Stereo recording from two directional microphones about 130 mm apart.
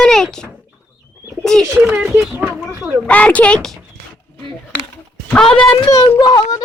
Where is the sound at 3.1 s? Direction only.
10° left (ahead or behind).